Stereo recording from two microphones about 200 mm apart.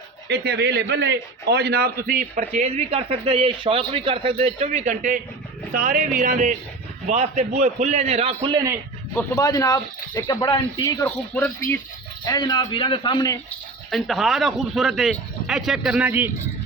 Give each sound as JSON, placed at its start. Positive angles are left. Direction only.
{"t": 0.3, "sound": "a man's voice", "side_deg": -55}
{"t": 9.1, "sound": "speech", "side_deg": 15}
{"t": 10.8, "sound": "a man's voice", "side_deg": 10}
{"t": 13.9, "sound": "speech", "side_deg": 0}